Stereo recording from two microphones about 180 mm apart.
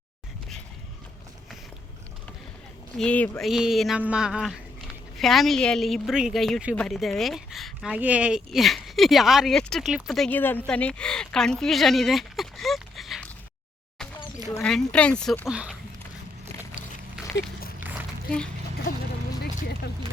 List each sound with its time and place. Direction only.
3.0 s speech: 5° left (ahead or behind)
14.6 s speech: 5° left (ahead or behind)
17.2 s dog: 5° right (ahead or behind)